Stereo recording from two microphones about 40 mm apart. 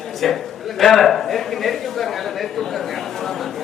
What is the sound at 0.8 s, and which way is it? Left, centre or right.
A man's voice, centre.